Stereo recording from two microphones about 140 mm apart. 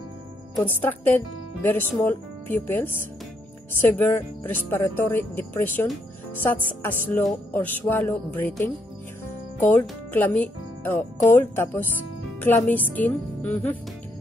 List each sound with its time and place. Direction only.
0.7 s speech: 15° left (ahead or behind)